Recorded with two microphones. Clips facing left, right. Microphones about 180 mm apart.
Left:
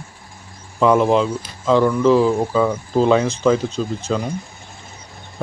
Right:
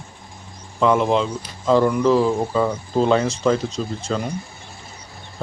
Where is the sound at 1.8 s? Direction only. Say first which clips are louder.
Left 2 dB; 15° right (ahead or behind).